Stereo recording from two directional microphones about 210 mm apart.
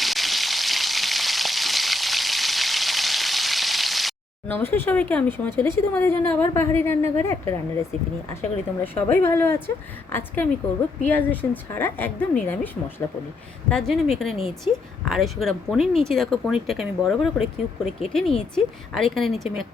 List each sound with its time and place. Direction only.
0.0 s frying: centre (ahead or behind)
7.2 s a woman's voice: 15° left (ahead or behind)